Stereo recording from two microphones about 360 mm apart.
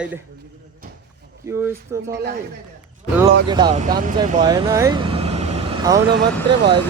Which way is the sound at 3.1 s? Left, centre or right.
Centre.